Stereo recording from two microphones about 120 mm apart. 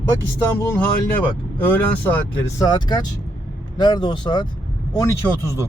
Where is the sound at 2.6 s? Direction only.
35° left (ahead or behind).